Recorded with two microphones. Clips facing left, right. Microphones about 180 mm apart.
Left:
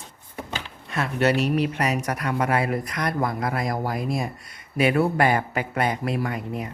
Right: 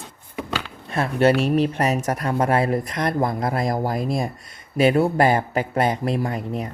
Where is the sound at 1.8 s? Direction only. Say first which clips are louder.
Right 3 dB; 45° right (ahead or behind).